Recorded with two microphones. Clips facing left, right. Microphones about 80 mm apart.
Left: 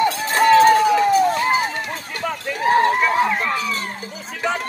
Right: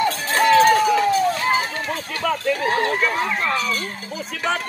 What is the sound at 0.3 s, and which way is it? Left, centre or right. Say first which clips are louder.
Run: left 2 dB; centre.